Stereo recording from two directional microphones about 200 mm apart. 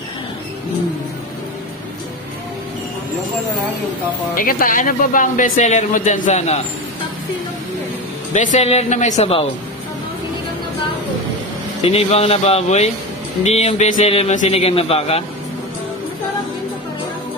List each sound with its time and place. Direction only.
4.4 s speech: 45° left (ahead or behind)
8.3 s speech: 40° left (ahead or behind)
11.8 s speech: 30° left (ahead or behind)